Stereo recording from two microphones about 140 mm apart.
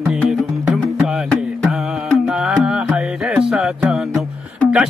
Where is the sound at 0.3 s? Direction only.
Centre (ahead or behind).